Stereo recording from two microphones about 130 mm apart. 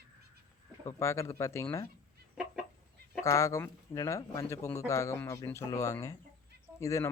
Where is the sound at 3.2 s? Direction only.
25° left (ahead or behind).